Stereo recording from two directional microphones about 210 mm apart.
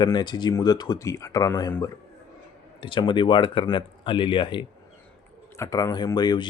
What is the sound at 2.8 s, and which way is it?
Speech, 25° left (ahead or behind).